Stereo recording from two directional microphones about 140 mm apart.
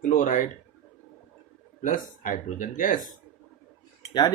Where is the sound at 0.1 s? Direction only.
70° left (ahead or behind).